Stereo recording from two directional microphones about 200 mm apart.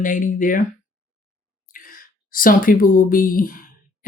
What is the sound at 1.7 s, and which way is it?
Speech, 45° left (ahead or behind).